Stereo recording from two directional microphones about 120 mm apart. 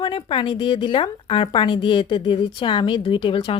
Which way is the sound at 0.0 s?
45° left (ahead or behind).